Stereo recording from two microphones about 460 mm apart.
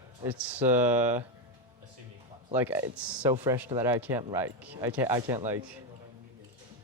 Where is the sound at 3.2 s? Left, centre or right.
Centre.